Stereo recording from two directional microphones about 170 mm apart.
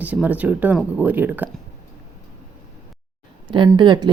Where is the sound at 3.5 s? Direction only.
25° right (ahead or behind).